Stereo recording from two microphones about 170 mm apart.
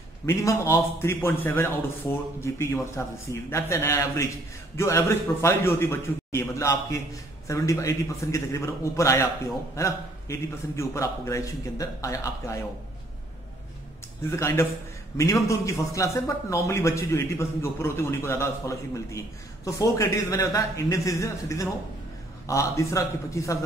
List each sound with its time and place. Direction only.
0.3 s a man's voice: 15° left (ahead or behind)
14.3 s a man's voice: 15° left (ahead or behind)